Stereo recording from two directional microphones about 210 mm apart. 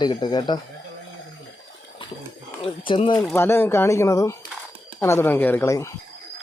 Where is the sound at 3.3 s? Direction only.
10° left (ahead or behind).